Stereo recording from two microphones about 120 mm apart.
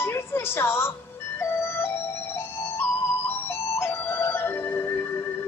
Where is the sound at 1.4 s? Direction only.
20° left (ahead or behind).